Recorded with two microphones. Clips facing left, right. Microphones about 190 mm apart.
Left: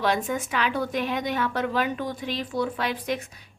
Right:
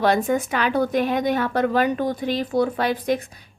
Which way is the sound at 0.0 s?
45° right (ahead or behind).